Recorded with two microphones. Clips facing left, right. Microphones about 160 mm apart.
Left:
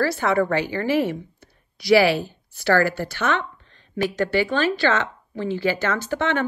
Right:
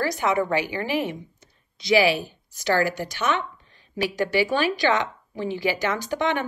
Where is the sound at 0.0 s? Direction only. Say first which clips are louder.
Left 3 dB; 15° right (ahead or behind).